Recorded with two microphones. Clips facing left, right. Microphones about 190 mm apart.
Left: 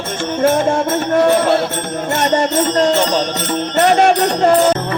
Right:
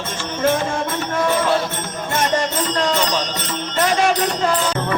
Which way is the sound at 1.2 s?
60° left (ahead or behind).